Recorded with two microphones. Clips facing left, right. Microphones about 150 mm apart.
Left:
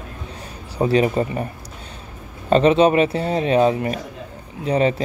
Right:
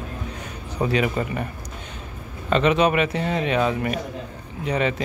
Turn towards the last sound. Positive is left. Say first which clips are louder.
# left 5 dB
turn(degrees=35)  # may be behind; listen again after turning